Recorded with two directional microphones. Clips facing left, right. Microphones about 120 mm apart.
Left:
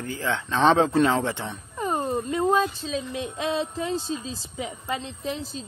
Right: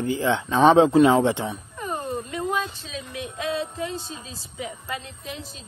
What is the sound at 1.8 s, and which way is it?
Speech, 30° left (ahead or behind).